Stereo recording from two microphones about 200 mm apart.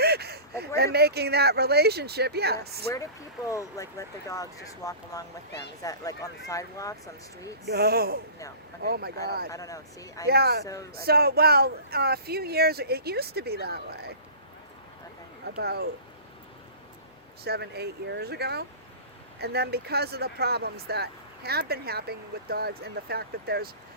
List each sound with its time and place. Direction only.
0.0 s a sound: 55° right (ahead or behind)
0.9 s speech: 55° right (ahead or behind)
2.9 s speech: 15° left (ahead or behind)
7.7 s speech: 50° right (ahead or behind)
9.5 s speech: 15° left (ahead or behind)
10.2 s speech: 50° right (ahead or behind)
15.6 s speech: 55° right (ahead or behind)
17.4 s speech: 55° right (ahead or behind)